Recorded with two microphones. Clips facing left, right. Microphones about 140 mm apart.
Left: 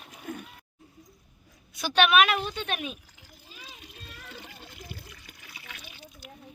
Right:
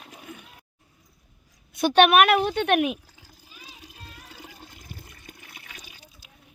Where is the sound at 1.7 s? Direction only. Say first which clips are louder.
Right 5 dB; 55° right (ahead or behind).